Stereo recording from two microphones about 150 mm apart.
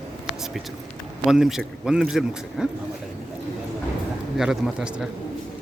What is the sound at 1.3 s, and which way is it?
Speech, 5° right (ahead or behind).